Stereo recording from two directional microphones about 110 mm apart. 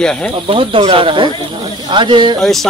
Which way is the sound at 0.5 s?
55° right (ahead or behind).